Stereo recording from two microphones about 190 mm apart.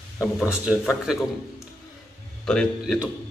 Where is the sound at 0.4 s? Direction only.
5° right (ahead or behind).